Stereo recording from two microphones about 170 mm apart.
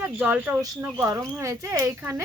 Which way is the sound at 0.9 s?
15° right (ahead or behind).